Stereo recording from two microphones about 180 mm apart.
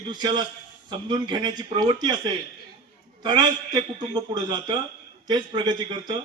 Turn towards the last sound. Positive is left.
turn(degrees=-25)  # may be behind; listen again after turning